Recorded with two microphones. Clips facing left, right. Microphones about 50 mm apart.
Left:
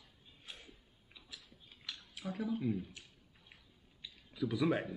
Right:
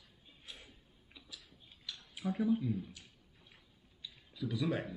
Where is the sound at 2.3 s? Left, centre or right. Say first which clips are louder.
Right 6 dB; centre.